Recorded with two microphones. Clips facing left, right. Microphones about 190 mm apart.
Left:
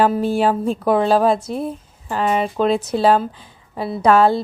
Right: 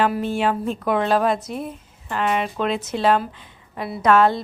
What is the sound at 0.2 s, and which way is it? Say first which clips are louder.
Speech: left 4 dB; 35° left (ahead or behind).